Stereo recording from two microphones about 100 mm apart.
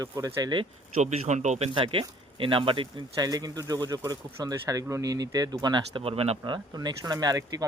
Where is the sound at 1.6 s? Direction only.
60° right (ahead or behind).